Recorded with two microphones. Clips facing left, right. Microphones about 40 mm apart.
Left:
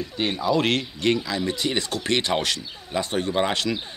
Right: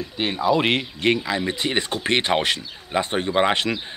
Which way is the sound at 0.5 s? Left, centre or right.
Right.